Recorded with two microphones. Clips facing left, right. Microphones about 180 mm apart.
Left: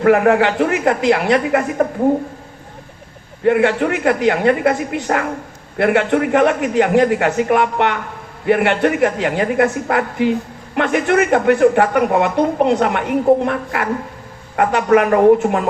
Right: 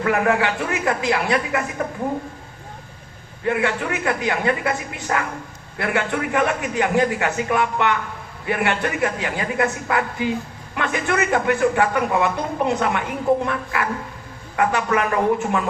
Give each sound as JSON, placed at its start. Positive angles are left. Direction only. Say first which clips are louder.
{"t": 0.0, "sound": "a man's voice", "louder": "left 7 dB", "side_deg": 50}
{"t": 3.4, "sound": "a man's voice", "louder": "left 8 dB", "side_deg": 50}